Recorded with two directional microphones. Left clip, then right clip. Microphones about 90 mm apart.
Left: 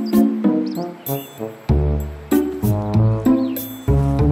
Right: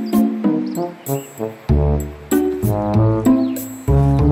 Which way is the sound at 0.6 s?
30° left (ahead or behind).